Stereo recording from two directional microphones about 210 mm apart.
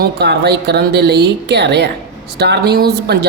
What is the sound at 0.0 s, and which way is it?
Speech, 50° right (ahead or behind).